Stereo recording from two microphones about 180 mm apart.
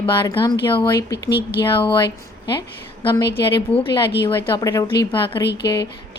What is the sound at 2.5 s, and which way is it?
A woman's voice, 25° left (ahead or behind).